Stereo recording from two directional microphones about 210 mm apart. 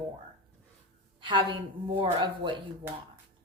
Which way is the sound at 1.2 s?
20° right (ahead or behind).